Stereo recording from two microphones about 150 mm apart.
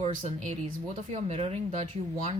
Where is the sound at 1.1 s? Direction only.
45° right (ahead or behind).